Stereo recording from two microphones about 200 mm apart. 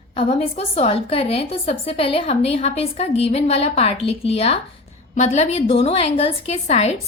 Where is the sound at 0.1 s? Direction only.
30° left (ahead or behind).